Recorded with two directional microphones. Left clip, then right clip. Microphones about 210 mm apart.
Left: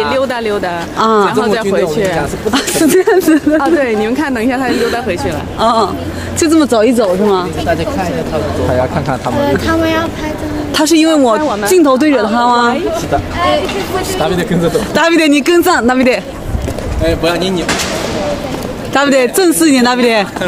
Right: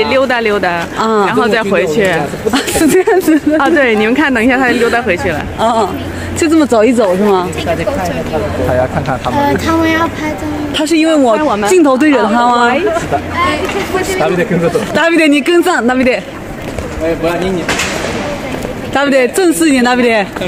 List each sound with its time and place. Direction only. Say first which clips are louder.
0.0 s speech: right 3 dB; 30° right (ahead or behind)
0.9 s a man's voice: left 4 dB; centre (ahead or behind)
1.4 s a woman's voice: right 1 dB; 30° right (ahead or behind)
2.5 s a man's voice: even; 5° right (ahead or behind)
3.6 s a woman's voice: right 2 dB; 35° right (ahead or behind)
5.6 s a man's voice: left 2 dB; centre (ahead or behind)
9.4 s speech: right 1 dB; 55° right (ahead or behind)
10.7 s speech: left 1 dB; 10° left (ahead or behind)
11.4 s speech: right 2 dB; 50° right (ahead or behind)
11.7 s a man's voice: left 1 dB; 5° right (ahead or behind)
14.7 s a man's voice: left 2 dB; centre (ahead or behind)
18.9 s a man's voice: even; 5° left (ahead or behind)